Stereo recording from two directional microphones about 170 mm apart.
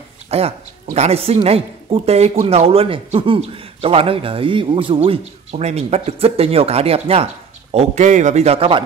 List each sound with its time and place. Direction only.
0.3 s a man's voice: 40° right (ahead or behind)